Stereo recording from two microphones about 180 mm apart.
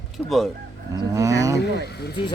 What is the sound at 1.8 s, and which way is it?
Speech, 65° left (ahead or behind).